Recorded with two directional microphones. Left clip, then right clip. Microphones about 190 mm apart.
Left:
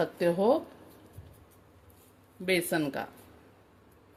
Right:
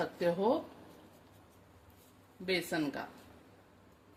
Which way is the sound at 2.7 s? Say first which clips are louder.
Left 5 dB; 45° left (ahead or behind).